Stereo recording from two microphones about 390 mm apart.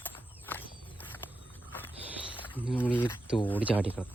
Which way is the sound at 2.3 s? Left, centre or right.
Centre.